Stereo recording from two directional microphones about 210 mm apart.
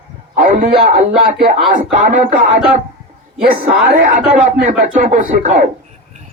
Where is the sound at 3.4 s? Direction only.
40° right (ahead or behind).